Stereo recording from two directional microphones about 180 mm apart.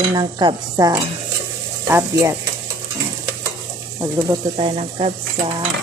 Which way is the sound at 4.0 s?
15° right (ahead or behind).